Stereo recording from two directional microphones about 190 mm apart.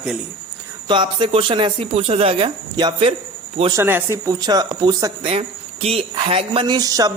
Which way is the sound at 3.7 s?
10° right (ahead or behind).